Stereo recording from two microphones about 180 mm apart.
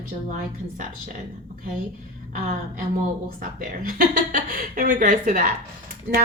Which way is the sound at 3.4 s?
50° right (ahead or behind).